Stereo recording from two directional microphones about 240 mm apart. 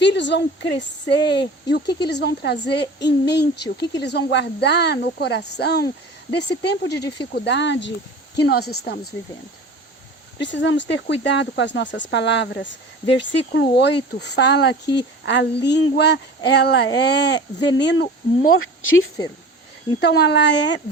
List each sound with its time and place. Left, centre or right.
0.0 s speech: left
10.4 s speech: left
18.5 s speech: left
20.0 s speech: left